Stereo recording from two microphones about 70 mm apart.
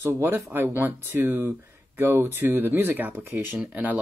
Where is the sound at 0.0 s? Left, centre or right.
Right.